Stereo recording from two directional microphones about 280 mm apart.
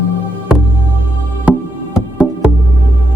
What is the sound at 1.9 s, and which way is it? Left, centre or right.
Music, centre.